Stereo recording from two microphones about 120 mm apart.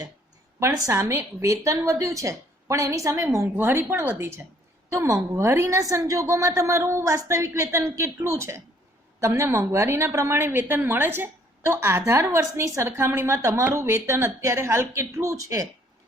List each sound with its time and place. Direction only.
0.6 s a woman's voice: 25° right (ahead or behind)